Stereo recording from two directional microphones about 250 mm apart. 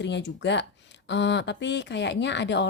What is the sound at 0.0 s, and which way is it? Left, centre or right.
Speech, left.